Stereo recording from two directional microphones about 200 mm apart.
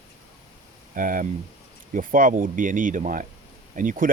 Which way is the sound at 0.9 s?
45° right (ahead or behind).